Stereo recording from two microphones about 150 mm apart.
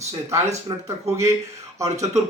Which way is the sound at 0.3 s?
20° right (ahead or behind).